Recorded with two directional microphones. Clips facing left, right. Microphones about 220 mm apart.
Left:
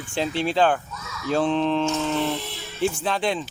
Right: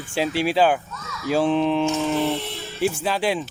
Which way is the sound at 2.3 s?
Centre (ahead or behind).